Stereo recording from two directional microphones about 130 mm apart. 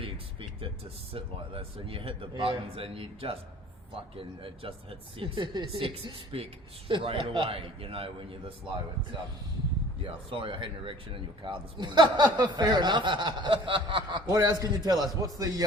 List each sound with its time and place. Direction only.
0.0 s a sound: 45° right (ahead or behind)
1.1 s speech: 45° right (ahead or behind)
10.0 s speech: 40° right (ahead or behind)
14.3 s a man's voice: 30° right (ahead or behind)